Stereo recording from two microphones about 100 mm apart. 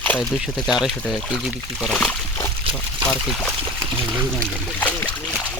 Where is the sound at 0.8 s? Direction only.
5° right (ahead or behind).